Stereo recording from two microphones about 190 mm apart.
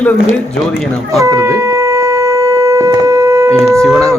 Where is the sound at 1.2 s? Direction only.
15° right (ahead or behind).